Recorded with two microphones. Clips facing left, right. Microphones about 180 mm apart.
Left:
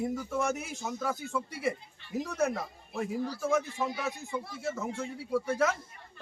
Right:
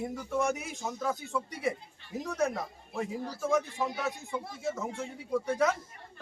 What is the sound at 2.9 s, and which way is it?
Speech, 20° right (ahead or behind).